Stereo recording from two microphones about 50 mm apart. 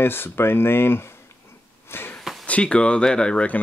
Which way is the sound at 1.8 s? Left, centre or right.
Left.